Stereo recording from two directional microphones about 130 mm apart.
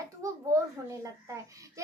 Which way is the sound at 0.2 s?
25° right (ahead or behind).